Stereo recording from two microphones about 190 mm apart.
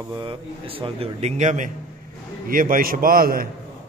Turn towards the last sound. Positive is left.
turn(degrees=-50)  # may be behind; listen again after turning